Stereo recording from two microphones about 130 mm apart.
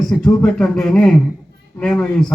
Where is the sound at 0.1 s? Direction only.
5° left (ahead or behind).